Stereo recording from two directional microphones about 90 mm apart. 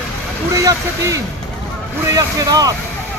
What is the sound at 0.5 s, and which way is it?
Speech, 35° right (ahead or behind).